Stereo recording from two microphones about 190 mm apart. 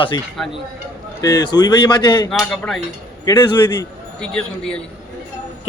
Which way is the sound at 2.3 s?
Centre (ahead or behind).